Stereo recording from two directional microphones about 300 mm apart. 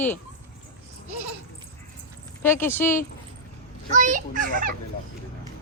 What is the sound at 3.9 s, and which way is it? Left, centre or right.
Speech, right.